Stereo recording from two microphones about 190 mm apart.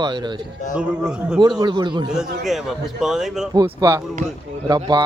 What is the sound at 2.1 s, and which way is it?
A man's voice, centre (ahead or behind).